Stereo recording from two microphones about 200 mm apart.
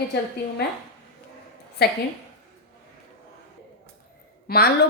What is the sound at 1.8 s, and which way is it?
Speech, 55° left (ahead or behind).